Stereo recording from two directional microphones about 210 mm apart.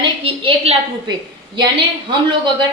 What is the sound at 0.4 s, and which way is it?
Speech, 30° right (ahead or behind).